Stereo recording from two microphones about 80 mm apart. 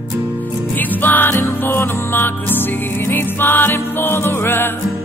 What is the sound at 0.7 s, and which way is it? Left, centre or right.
Music, left.